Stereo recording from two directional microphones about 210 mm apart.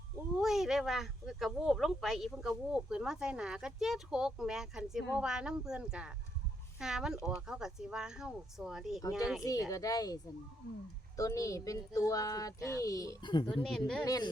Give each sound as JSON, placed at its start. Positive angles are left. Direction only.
{"t": 0.3, "sound": "speech", "side_deg": 0}
{"t": 9.4, "sound": "speech", "side_deg": 15}
{"t": 11.2, "sound": "speech", "side_deg": 15}
{"t": 13.5, "sound": "speech", "side_deg": 0}
{"t": 14.0, "sound": "speech", "side_deg": 15}